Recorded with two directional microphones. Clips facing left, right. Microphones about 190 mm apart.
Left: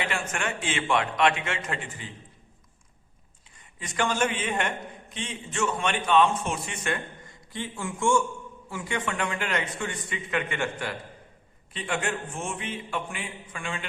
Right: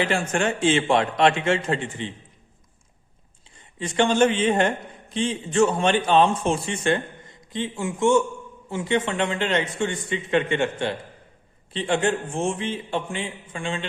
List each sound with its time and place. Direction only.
0.0 s a man's voice: 30° right (ahead or behind)
3.8 s a man's voice: 30° right (ahead or behind)